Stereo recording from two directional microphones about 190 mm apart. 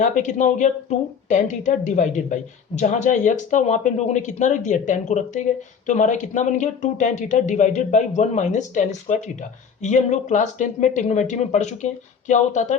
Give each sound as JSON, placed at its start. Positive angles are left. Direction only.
{"t": 0.0, "sound": "speech", "side_deg": 40}